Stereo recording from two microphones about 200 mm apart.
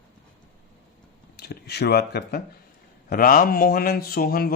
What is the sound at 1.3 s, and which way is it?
Speech, 55° left (ahead or behind).